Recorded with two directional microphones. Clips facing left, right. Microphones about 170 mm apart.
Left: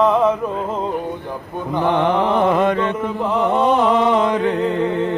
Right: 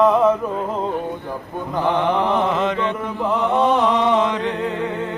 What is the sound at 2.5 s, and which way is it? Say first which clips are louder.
Mantra: left 4 dB; 55° left (ahead or behind).